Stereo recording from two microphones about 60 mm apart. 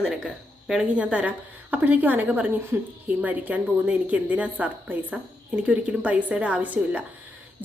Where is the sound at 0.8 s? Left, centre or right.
Right.